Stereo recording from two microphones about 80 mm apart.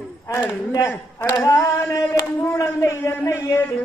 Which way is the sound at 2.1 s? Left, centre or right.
Left.